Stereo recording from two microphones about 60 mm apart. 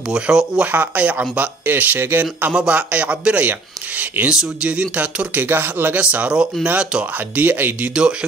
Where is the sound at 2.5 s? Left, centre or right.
Right.